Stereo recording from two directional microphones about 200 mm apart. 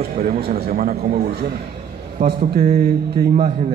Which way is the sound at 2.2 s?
45° right (ahead or behind).